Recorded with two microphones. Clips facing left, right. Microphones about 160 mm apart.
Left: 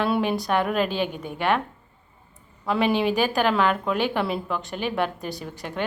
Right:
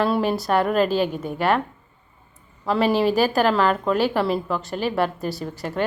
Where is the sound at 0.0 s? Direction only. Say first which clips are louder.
Right 2 dB; centre (ahead or behind).